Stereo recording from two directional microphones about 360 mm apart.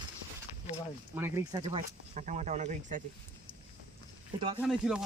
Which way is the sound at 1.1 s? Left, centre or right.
Centre.